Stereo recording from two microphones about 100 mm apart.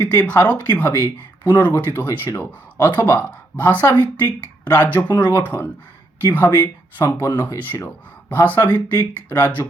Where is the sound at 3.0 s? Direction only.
40° left (ahead or behind).